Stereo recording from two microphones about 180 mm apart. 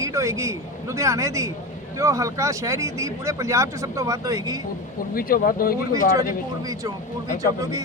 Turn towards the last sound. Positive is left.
turn(degrees=-20)  # may be behind; listen again after turning